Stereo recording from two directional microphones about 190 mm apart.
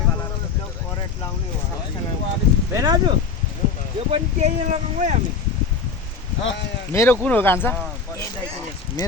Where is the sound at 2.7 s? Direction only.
20° right (ahead or behind).